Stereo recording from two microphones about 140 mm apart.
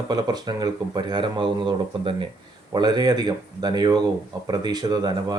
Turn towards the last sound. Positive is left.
turn(degrees=-30)  # may be behind; listen again after turning